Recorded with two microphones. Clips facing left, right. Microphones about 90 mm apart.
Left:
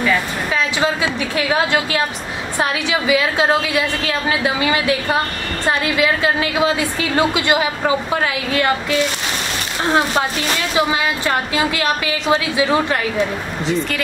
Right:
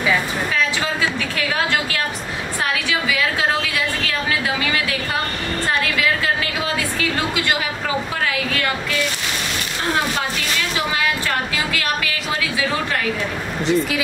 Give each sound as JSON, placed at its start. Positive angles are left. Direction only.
{"t": 0.7, "sound": "a woman's voice", "side_deg": 20}
{"t": 11.2, "sound": "a woman's voice", "side_deg": 25}
{"t": 13.7, "sound": "speech", "side_deg": -5}